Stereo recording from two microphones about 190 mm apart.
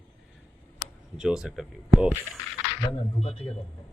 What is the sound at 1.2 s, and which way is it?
Speech, 5° right (ahead or behind).